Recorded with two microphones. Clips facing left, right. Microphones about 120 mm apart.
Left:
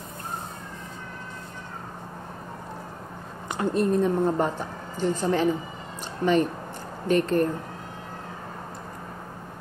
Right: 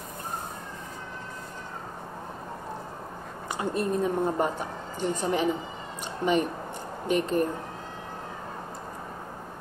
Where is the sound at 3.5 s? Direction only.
5° right (ahead or behind).